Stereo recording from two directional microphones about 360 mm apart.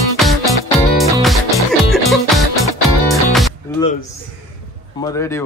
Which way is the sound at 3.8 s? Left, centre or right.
Centre.